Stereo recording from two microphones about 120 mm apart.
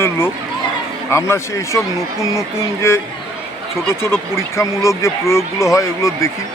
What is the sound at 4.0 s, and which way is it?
A man's voice, 20° left (ahead or behind).